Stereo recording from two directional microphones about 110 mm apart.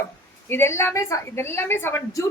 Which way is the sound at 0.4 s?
20° left (ahead or behind).